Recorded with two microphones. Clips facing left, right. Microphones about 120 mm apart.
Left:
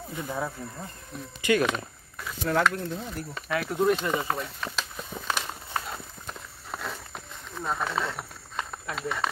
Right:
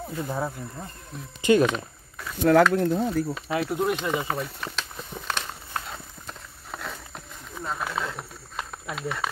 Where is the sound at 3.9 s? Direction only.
5° right (ahead or behind).